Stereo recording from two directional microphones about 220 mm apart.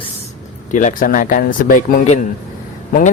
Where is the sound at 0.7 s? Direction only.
35° left (ahead or behind).